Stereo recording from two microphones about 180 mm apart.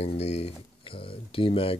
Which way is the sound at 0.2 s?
35° left (ahead or behind).